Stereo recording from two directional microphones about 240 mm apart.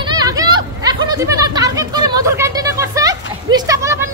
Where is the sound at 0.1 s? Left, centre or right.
Centre.